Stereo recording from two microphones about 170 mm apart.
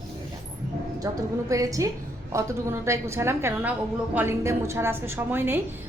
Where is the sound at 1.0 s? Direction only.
20° right (ahead or behind).